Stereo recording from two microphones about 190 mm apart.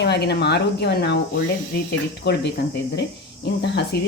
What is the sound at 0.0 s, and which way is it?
Speech, 60° left (ahead or behind).